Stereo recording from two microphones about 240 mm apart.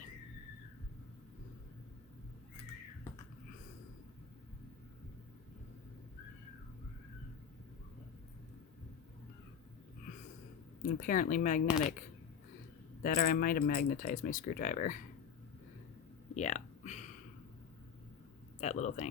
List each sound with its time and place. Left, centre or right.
10.8 s speech: left
16.3 s a sound: left
18.6 s speech: left